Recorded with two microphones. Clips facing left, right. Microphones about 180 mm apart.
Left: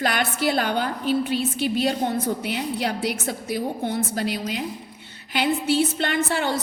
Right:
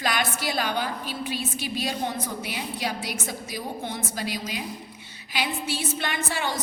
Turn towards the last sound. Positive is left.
turn(degrees=55)  # may be behind; listen again after turning